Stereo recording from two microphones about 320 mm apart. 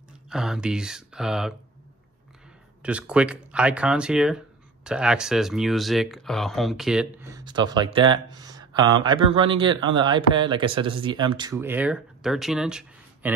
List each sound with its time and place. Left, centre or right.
0.3 s speech: centre
2.8 s speech: centre